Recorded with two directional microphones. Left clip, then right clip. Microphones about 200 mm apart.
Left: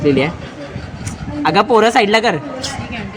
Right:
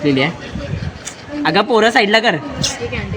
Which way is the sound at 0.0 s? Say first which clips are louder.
Left 1 dB; 5° left (ahead or behind).